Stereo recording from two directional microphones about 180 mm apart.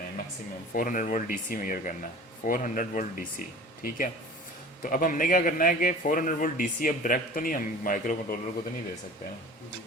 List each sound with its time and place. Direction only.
0.7 s a man's voice: 50° left (ahead or behind)